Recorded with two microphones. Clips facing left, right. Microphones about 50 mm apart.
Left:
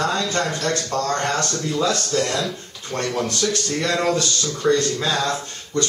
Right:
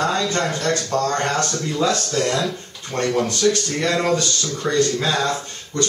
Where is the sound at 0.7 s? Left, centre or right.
Centre.